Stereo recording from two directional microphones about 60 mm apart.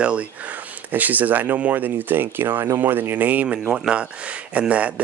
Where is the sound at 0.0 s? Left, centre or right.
Centre; by 2.8 s right.